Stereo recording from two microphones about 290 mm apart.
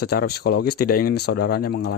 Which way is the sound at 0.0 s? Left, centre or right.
Left.